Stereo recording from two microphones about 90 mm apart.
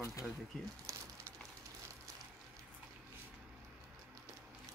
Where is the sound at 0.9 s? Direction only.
35° right (ahead or behind).